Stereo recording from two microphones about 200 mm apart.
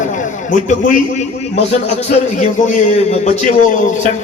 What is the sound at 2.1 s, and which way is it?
A man's voice, 40° left (ahead or behind).